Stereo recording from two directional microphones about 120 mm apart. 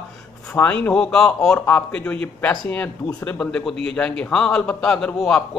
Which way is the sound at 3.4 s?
5° left (ahead or behind).